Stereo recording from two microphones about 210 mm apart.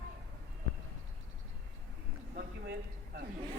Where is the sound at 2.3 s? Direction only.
50° right (ahead or behind).